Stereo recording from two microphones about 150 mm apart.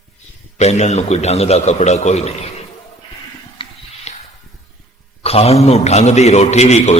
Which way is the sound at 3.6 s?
35° left (ahead or behind).